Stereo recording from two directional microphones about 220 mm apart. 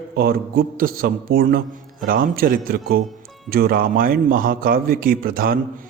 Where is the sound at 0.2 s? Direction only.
40° right (ahead or behind).